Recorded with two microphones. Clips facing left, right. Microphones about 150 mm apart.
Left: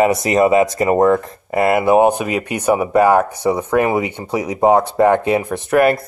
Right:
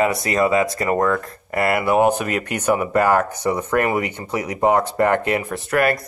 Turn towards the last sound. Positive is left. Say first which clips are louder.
# left 5 dB
turn(degrees=25)  # may be behind; listen again after turning